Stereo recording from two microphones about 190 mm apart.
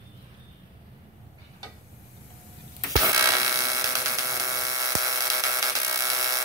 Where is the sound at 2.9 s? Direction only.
15° right (ahead or behind).